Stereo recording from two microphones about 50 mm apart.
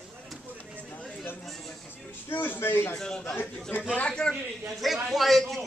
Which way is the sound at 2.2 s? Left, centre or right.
Left.